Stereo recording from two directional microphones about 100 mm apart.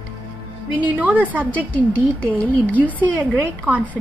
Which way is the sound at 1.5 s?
15° left (ahead or behind).